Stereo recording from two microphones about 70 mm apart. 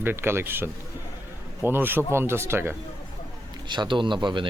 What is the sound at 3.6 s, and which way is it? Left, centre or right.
Speech, right.